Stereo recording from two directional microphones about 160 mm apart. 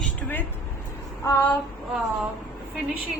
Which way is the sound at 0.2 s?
10° left (ahead or behind).